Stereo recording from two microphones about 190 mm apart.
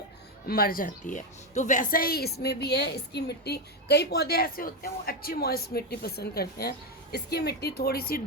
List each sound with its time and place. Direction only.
0.4 s a woman's voice: 50° left (ahead or behind)